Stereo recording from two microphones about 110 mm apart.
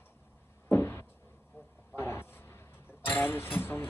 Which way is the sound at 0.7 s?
20° left (ahead or behind).